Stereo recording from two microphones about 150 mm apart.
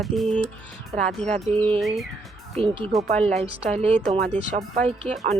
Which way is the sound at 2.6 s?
40° right (ahead or behind).